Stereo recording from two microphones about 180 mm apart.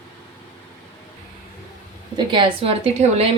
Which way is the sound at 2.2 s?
25° right (ahead or behind).